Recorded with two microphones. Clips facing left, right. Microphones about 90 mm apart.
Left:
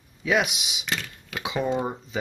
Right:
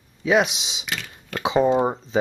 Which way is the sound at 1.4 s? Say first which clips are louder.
Right 9 dB; 30° right (ahead or behind).